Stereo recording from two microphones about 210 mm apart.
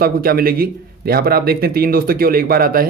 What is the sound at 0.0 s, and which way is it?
A man's voice, 45° right (ahead or behind).